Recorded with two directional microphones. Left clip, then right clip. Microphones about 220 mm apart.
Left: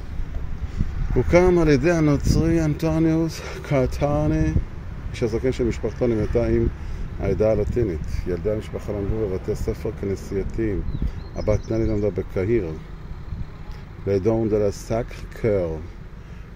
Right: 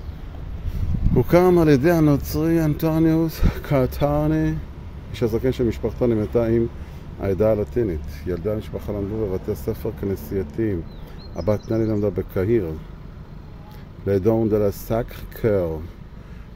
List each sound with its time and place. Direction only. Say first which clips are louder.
1.2 s speech: right 1 dB; 20° right (ahead or behind)
14.0 s speech: right 2 dB; 15° right (ahead or behind)